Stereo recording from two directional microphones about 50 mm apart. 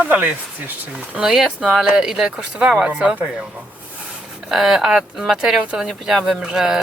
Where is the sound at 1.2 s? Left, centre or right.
Centre.